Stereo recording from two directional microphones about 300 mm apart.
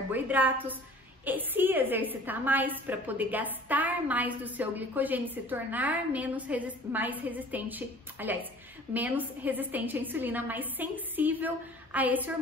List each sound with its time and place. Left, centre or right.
0.1 s a woman's voice: centre